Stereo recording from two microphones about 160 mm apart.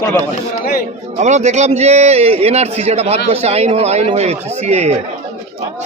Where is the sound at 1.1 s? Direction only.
45° right (ahead or behind).